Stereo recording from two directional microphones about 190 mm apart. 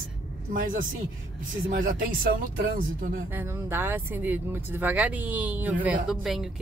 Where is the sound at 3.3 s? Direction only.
10° right (ahead or behind).